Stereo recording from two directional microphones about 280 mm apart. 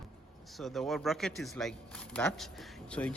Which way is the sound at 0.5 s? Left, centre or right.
Centre.